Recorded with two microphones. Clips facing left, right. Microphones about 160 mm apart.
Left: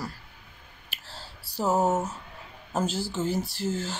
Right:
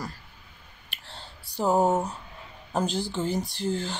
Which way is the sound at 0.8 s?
5° left (ahead or behind).